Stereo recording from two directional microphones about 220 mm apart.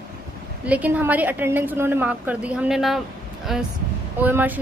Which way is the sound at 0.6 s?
5° right (ahead or behind).